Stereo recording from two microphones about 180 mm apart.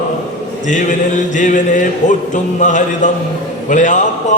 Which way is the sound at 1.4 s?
45° left (ahead or behind).